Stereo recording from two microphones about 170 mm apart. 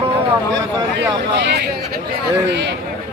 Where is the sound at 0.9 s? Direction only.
90° right.